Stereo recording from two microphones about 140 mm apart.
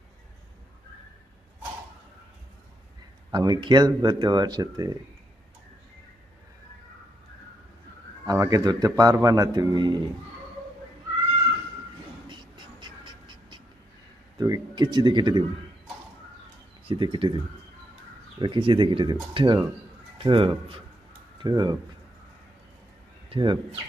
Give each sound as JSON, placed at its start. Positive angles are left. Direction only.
{"t": 3.3, "sound": "speech", "side_deg": -30}
{"t": 8.3, "sound": "a man's voice", "side_deg": -25}
{"t": 12.3, "sound": "a sound", "side_deg": -35}
{"t": 14.3, "sound": "speech", "side_deg": -30}
{"t": 16.8, "sound": "speech", "side_deg": -35}
{"t": 23.3, "sound": "speech", "side_deg": -35}